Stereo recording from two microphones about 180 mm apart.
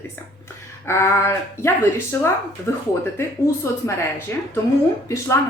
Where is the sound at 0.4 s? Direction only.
15° left (ahead or behind).